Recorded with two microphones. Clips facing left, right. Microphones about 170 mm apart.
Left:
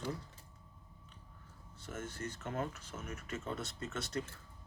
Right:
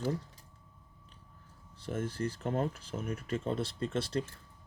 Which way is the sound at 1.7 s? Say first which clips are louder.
Right 8 dB; 30° right (ahead or behind).